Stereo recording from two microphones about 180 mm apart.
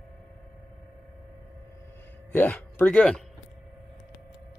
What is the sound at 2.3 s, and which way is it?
Speech, 10° left (ahead or behind).